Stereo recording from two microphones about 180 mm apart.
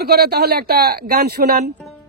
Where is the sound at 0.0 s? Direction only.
60° right (ahead or behind).